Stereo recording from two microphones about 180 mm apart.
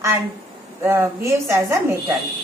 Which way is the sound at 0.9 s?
15° right (ahead or behind).